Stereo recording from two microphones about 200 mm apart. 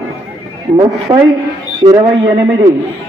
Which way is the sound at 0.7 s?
25° right (ahead or behind).